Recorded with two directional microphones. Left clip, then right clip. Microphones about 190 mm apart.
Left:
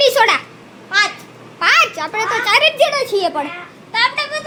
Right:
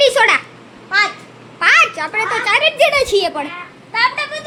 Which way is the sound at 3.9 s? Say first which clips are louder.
Even; 5° left (ahead or behind).